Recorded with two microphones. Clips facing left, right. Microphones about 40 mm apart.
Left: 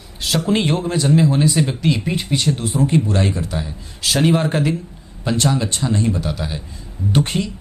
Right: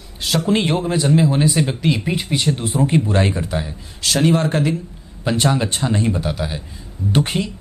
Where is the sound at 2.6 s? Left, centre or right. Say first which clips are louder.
Even; right.